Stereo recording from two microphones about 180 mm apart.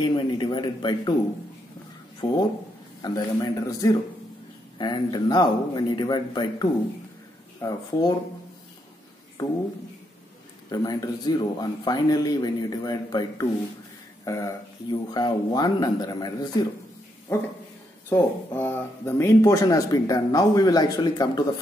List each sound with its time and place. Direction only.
0.0 s speech: 25° left (ahead or behind)
2.2 s speech: 30° left (ahead or behind)
3.0 s speech: 20° left (ahead or behind)
10.7 s speech: 20° left (ahead or behind)
17.3 s speech: 10° left (ahead or behind)